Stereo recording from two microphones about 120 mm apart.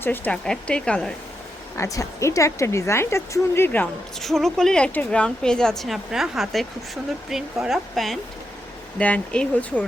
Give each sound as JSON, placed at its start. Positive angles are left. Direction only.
{"t": 0.0, "sound": "speech", "side_deg": 15}
{"t": 1.7, "sound": "speech", "side_deg": 25}
{"t": 4.2, "sound": "a woman's voice", "side_deg": 0}
{"t": 9.0, "sound": "speech", "side_deg": 10}